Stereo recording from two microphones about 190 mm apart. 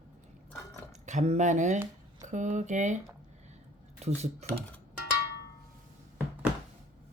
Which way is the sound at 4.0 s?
35° right (ahead or behind).